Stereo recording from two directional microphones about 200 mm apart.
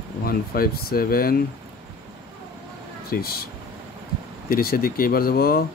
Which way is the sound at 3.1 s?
50° left (ahead or behind).